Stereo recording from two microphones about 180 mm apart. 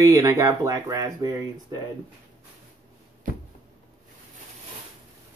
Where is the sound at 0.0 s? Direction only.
20° right (ahead or behind).